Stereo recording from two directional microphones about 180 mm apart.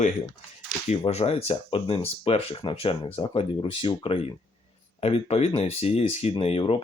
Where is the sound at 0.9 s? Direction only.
35° left (ahead or behind).